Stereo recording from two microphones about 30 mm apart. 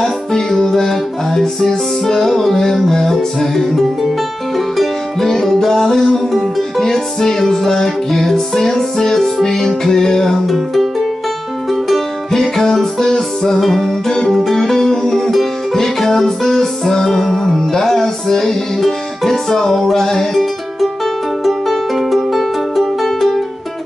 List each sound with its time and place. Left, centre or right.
0.7 s music: centre
10.4 s music: centre
12.4 s music: centre
13.6 s music: centre
21.5 s music: centre